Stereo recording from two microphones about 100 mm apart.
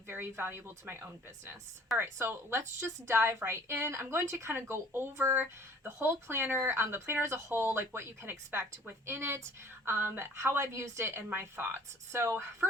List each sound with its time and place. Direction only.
0.1 s a woman's voice: 25° right (ahead or behind)
2.0 s a woman's voice: 25° right (ahead or behind)